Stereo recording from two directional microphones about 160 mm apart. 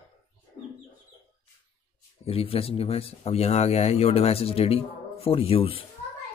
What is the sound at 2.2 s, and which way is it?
Speech, 35° left (ahead or behind).